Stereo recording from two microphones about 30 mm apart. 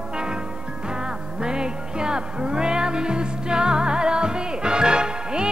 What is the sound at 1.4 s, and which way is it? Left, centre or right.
Music, right.